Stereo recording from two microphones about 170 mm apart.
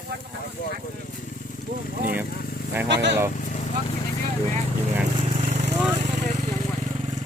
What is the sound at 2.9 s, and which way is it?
Speech, 90° right.